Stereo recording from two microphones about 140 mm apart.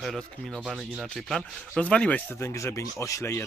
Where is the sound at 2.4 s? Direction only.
20° left (ahead or behind).